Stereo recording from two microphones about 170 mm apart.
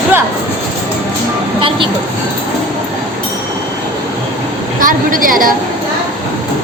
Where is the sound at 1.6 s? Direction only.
30° right (ahead or behind).